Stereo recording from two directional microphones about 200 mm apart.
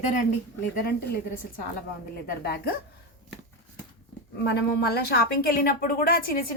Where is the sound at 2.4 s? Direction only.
50° left (ahead or behind).